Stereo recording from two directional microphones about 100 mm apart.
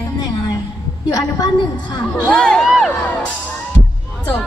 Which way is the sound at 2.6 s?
Centre (ahead or behind).